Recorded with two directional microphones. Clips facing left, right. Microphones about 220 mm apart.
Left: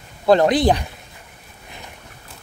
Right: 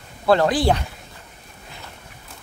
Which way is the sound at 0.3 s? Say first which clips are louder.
Left 3 dB; 20° left (ahead or behind).